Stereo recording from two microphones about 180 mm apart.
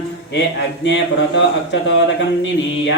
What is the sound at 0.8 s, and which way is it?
Speech, 90° left.